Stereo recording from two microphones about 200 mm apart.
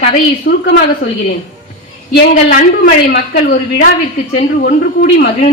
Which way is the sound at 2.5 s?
45° left (ahead or behind).